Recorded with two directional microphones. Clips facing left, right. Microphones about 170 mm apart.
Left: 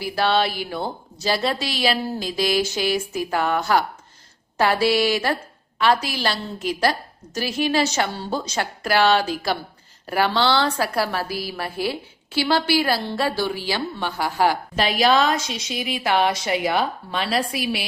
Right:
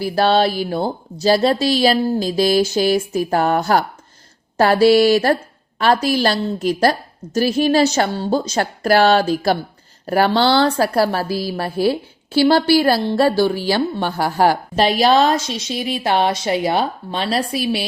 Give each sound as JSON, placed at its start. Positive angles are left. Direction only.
{"t": 0.0, "sound": "a woman's voice", "side_deg": -35}